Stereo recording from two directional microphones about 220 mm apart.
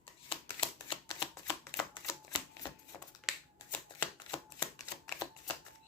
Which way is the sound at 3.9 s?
20° left (ahead or behind).